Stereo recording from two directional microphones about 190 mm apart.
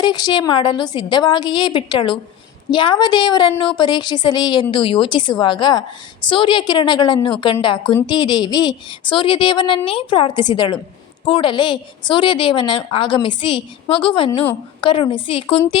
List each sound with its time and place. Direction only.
0.0 s a woman's voice: 20° left (ahead or behind)